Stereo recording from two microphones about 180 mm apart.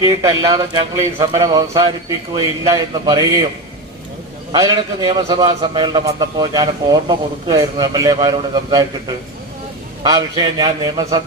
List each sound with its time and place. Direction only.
0.0 s a man's voice: 20° right (ahead or behind)
4.5 s a man's voice: 20° right (ahead or behind)